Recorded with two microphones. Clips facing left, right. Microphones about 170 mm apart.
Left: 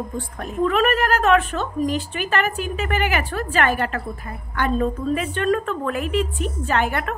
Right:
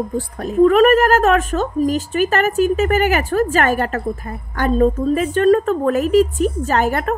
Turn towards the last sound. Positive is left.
turn(degrees=-40)  # may be behind; listen again after turning